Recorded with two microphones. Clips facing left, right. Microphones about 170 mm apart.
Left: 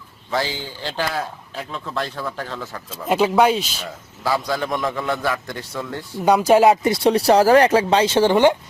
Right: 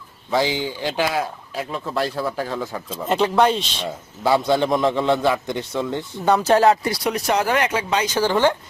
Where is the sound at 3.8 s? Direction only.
25° right (ahead or behind).